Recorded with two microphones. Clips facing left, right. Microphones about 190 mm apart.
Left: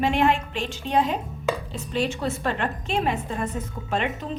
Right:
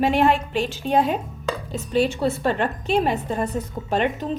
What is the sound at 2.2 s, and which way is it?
A woman's voice, 30° right (ahead or behind).